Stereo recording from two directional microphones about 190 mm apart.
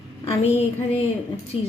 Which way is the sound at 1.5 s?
30° left (ahead or behind).